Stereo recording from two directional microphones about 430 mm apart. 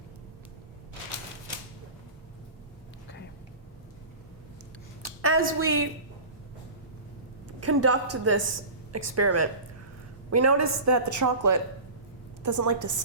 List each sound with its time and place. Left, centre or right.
5.0 s a sound: right
5.4 s a woman's voice: right
7.4 s a woman's voice: right